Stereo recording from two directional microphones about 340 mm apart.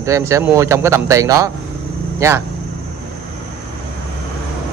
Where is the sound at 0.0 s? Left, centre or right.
Centre.